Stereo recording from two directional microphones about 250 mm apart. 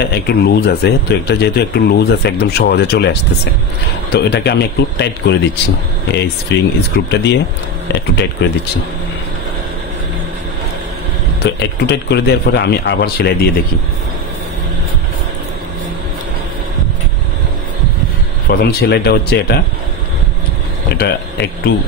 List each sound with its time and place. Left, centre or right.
0.0 s speech: left
4.1 s speech: left
6.5 s speech: left
11.4 s speech: left
18.5 s speech: left
21.0 s speech: left